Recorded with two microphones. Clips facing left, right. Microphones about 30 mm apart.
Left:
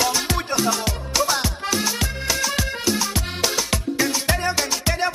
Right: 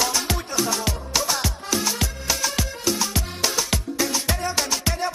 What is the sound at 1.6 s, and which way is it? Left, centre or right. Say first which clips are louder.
Music: left 2 dB; left.